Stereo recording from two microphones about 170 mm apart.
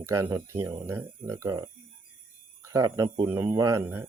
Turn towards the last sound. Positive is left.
turn(degrees=-15)  # may be behind; listen again after turning